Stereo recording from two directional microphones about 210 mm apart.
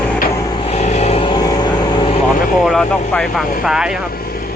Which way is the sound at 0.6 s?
30° left (ahead or behind).